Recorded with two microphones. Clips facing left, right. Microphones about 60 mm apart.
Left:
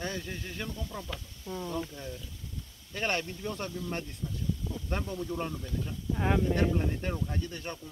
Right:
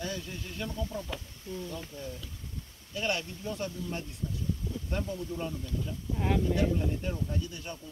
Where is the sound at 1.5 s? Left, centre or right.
Left.